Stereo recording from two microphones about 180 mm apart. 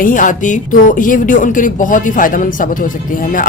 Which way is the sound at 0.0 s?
45° left (ahead or behind).